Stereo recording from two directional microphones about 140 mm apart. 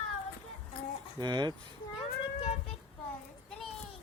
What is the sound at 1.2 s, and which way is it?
Speech, 30° right (ahead or behind).